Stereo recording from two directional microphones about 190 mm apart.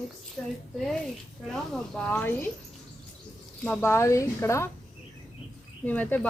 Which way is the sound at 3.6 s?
10° left (ahead or behind).